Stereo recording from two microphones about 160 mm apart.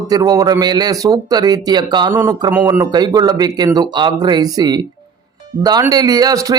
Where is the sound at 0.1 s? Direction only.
25° right (ahead or behind).